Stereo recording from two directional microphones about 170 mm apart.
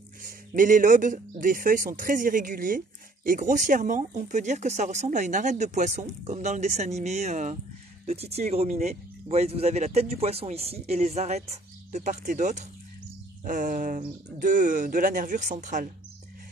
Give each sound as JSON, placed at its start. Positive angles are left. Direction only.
{"t": 0.2, "sound": "speech", "side_deg": -50}